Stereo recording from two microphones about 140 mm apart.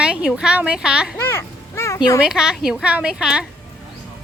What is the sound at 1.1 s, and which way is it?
Speech, 15° left (ahead or behind).